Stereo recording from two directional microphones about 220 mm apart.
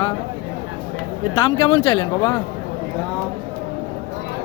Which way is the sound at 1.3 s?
20° left (ahead or behind).